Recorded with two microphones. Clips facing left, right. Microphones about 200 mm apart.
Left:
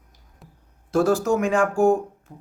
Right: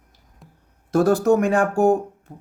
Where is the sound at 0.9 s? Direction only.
65° right (ahead or behind).